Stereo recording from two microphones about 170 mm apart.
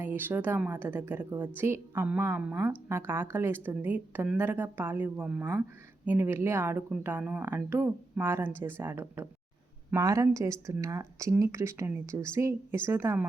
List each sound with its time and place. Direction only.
0.0 s speech: 10° right (ahead or behind)